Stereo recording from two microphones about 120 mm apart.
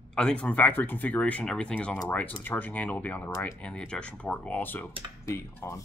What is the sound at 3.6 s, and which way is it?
Speech, 10° left (ahead or behind).